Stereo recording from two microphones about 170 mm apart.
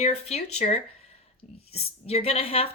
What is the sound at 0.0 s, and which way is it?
A woman's voice, 40° left (ahead or behind).